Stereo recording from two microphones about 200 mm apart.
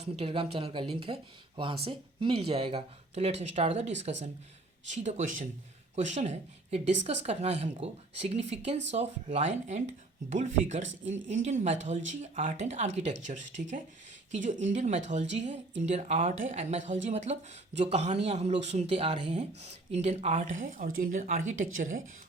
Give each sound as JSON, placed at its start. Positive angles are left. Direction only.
{"t": 0.0, "sound": "speech", "side_deg": -30}